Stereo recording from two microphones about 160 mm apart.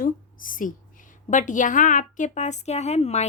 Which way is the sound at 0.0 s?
60° left (ahead or behind).